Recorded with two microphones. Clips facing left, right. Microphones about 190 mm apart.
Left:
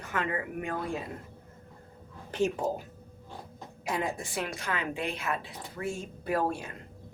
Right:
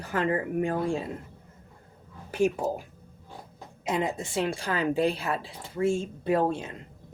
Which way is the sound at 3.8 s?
20° right (ahead or behind).